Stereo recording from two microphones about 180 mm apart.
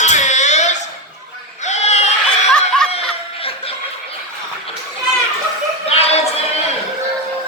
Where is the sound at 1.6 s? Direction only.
40° left (ahead or behind).